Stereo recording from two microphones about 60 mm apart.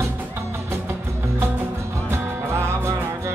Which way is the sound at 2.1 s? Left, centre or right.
Right.